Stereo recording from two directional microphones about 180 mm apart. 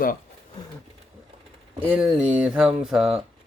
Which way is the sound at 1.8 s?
5° right (ahead or behind).